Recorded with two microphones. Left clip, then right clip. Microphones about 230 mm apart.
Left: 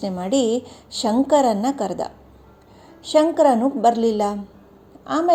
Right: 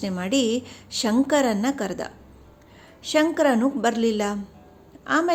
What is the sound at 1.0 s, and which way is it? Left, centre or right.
A woman's voice, centre.